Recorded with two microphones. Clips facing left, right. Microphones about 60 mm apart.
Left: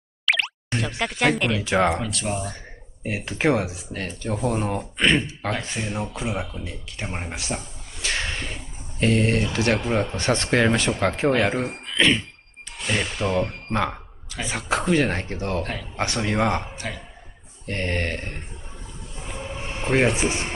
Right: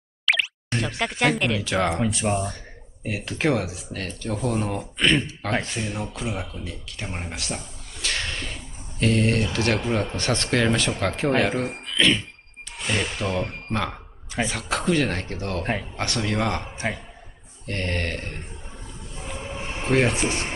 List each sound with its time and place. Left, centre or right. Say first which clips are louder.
0.2 s plop: even; centre
0.7 s speech: even; centre
3.3 s speech: left 2 dB; centre
10.2 s speech: left 3 dB; centre
11.9 s speech: left 1 dB; centre
12.7 s speech: left 1 dB; centre
13.7 s speech: left 3 dB; centre
18.9 s music: even; centre
19.8 s speech: left 1 dB; centre